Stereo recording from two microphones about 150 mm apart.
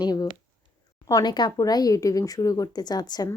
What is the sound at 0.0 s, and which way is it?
Speech, 25° left (ahead or behind).